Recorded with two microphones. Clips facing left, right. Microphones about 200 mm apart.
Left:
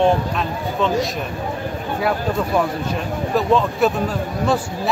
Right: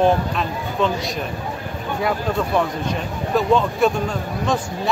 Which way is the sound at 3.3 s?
Centre (ahead or behind).